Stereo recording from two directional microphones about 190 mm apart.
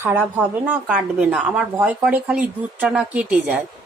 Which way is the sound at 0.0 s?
10° right (ahead or behind).